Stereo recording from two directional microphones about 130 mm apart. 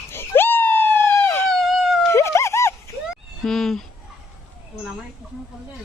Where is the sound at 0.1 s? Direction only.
15° left (ahead or behind).